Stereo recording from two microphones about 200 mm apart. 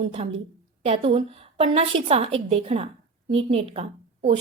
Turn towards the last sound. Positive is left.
turn(degrees=-30)  # may be behind; listen again after turning